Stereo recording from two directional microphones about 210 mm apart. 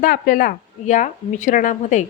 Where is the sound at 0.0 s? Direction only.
40° left (ahead or behind).